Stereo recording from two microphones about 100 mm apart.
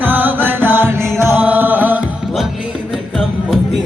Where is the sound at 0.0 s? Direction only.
20° right (ahead or behind).